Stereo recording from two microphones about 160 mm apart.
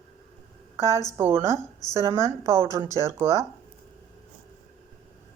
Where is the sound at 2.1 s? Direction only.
20° right (ahead or behind).